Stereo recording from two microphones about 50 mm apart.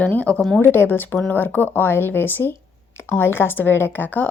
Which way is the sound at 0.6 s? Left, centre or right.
Left.